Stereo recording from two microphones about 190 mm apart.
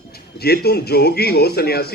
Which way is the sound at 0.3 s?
55° left (ahead or behind).